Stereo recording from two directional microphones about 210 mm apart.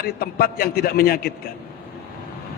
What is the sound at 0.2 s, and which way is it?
A man's voice, 50° left (ahead or behind).